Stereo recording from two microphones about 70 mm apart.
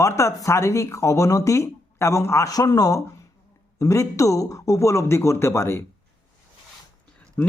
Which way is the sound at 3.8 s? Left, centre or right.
Left.